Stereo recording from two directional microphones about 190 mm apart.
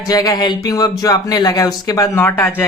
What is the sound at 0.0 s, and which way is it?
Speech, 20° left (ahead or behind).